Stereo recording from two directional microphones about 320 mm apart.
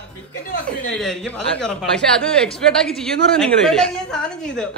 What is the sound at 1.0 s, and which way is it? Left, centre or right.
Speech, centre.